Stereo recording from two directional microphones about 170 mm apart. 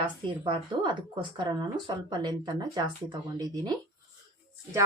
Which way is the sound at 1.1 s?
25° right (ahead or behind).